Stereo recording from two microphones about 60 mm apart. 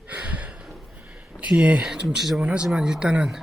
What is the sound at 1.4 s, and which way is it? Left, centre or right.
Speech, right.